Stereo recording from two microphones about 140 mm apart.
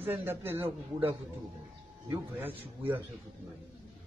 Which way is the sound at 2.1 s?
15° right (ahead or behind).